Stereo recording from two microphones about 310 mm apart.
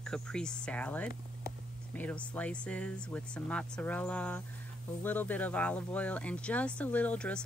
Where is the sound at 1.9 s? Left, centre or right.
Centre.